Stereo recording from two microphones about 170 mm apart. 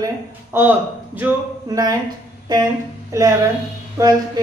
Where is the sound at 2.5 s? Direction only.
25° right (ahead or behind).